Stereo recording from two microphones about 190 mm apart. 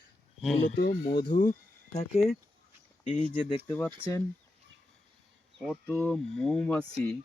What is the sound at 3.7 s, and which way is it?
Speech, 10° left (ahead or behind).